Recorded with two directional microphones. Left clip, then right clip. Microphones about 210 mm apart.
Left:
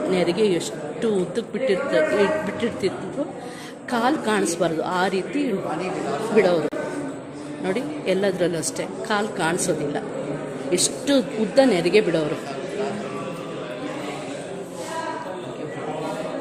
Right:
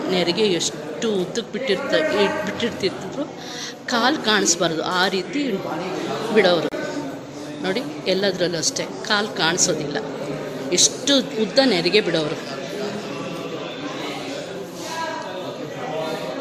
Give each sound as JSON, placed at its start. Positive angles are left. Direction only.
{"t": 0.1, "sound": "a woman's voice", "side_deg": 10}
{"t": 3.9, "sound": "a woman's voice", "side_deg": 5}
{"t": 6.3, "sound": "speech", "side_deg": 0}
{"t": 7.6, "sound": "a woman's voice", "side_deg": 5}